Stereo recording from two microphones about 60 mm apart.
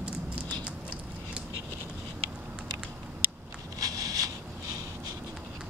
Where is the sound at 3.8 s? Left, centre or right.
Right.